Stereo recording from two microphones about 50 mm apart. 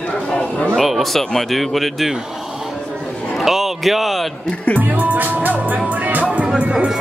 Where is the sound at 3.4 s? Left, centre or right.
Centre.